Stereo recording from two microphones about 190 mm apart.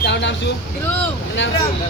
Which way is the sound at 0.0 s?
65° left (ahead or behind).